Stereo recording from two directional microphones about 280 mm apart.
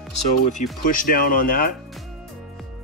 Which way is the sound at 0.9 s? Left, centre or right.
Left.